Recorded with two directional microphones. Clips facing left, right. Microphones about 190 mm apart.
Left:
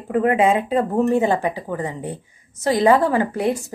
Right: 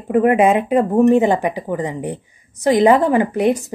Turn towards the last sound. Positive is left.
turn(degrees=-20)  # may be behind; listen again after turning